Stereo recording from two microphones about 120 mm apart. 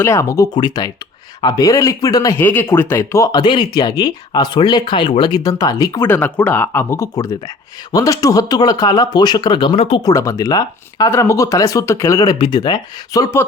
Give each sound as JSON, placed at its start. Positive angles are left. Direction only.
{"t": 0.0, "sound": "speech", "side_deg": 25}
{"t": 0.5, "sound": "speech", "side_deg": 35}
{"t": 2.4, "sound": "speech", "side_deg": 15}
{"t": 3.4, "sound": "speech", "side_deg": 35}
{"t": 6.0, "sound": "speech", "side_deg": 15}
{"t": 10.0, "sound": "speech", "side_deg": 30}